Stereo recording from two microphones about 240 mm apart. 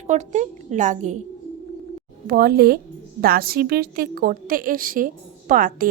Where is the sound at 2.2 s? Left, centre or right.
Right.